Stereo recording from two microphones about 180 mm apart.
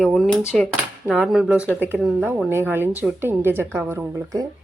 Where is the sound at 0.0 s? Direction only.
Centre (ahead or behind).